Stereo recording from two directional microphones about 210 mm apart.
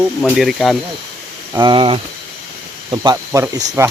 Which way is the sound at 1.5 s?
20° right (ahead or behind).